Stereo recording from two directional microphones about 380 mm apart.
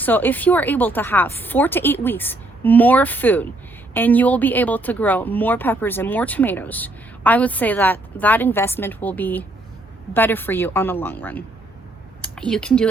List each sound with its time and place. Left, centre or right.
0.0 s speech: centre